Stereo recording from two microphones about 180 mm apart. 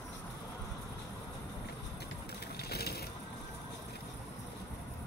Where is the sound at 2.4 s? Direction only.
60° left (ahead or behind).